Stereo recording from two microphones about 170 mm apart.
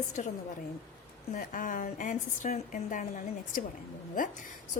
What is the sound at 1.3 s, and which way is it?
A woman's voice, 50° left (ahead or behind).